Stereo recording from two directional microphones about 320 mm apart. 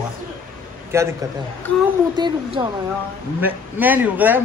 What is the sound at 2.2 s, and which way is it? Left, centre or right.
A man's voice, centre.